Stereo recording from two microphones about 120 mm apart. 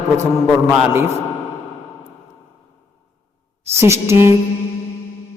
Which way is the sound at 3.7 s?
20° right (ahead or behind).